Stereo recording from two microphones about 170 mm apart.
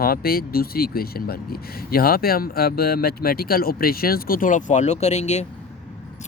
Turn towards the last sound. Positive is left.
turn(degrees=40)  # may be behind; listen again after turning